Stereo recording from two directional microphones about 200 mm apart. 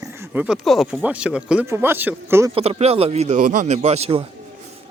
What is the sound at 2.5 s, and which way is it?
Speech, 30° right (ahead or behind).